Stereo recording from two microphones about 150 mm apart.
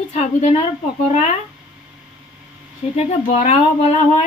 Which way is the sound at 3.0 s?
50° left (ahead or behind).